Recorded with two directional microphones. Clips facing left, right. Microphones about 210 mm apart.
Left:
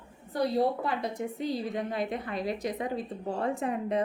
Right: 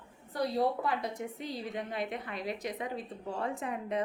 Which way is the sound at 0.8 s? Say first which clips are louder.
Left 3 dB; 30° left (ahead or behind).